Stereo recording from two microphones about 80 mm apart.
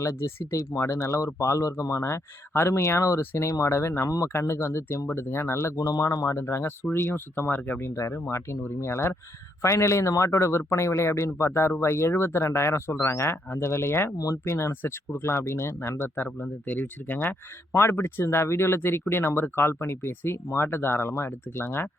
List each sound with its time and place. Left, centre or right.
0.0 s a man's voice: left